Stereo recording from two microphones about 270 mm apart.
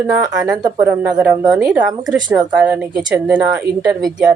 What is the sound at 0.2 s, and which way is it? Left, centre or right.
Speech, centre.